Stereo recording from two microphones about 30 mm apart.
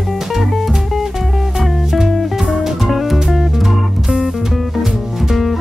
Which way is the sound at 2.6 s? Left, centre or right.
Centre.